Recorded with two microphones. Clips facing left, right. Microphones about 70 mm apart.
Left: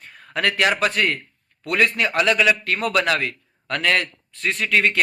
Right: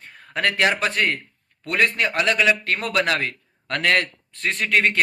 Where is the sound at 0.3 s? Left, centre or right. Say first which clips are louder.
Left 1 dB; right.